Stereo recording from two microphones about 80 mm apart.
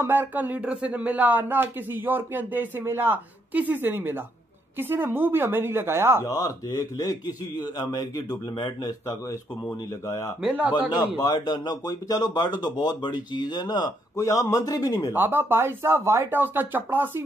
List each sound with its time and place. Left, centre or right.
0.0 s speech: right
6.2 s a man's voice: left
9.0 s speech: left
10.4 s a man's voice: centre
10.9 s speech: left
14.1 s a man's voice: left
15.1 s speech: right